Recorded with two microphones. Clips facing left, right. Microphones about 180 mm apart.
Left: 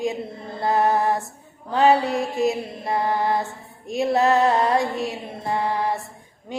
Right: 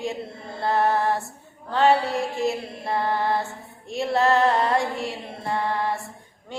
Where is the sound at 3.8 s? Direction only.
20° left (ahead or behind).